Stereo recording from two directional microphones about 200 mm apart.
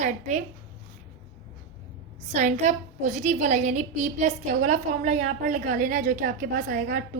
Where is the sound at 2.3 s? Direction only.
35° right (ahead or behind).